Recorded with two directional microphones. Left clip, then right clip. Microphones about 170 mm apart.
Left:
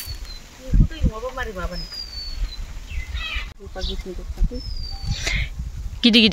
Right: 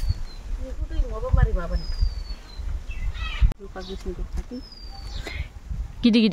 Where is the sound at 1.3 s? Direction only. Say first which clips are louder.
Left 2 dB; 10° right (ahead or behind).